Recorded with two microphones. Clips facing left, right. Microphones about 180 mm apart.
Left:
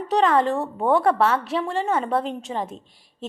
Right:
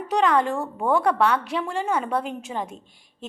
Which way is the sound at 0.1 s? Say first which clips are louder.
Left 2 dB; centre (ahead or behind).